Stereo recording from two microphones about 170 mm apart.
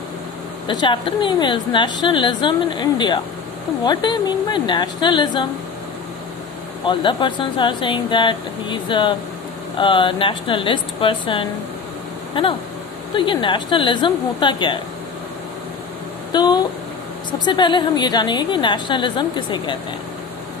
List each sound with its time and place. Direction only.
0.7 s a woman's voice: 25° left (ahead or behind)
6.8 s a woman's voice: 30° left (ahead or behind)
16.3 s a woman's voice: 25° left (ahead or behind)